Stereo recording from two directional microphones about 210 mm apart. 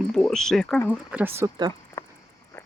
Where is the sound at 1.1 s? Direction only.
10° right (ahead or behind).